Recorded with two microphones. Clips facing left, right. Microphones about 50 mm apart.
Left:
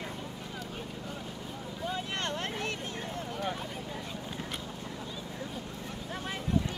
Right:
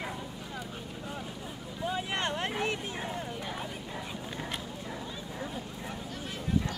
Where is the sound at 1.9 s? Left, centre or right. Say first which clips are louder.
Right 3 dB; centre.